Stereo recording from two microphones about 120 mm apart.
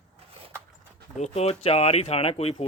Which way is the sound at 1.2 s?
60° left (ahead or behind).